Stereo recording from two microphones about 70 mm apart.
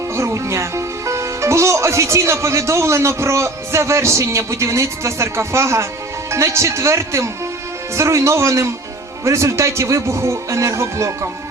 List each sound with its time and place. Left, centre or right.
0.2 s speech: right